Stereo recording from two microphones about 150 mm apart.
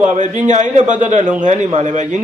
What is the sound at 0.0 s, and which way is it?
A man's voice, 50° right (ahead or behind).